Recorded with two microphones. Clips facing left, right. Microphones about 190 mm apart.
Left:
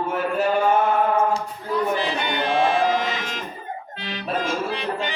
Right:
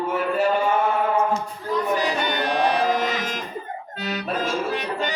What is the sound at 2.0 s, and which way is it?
Music, 45° right (ahead or behind).